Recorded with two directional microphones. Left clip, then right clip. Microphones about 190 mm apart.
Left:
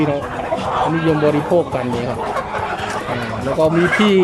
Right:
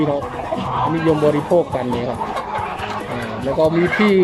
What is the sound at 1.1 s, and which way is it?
Speech, centre (ahead or behind).